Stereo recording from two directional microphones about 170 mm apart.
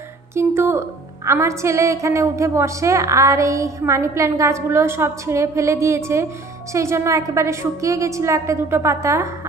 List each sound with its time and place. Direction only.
0.3 s a woman's voice: 15° right (ahead or behind)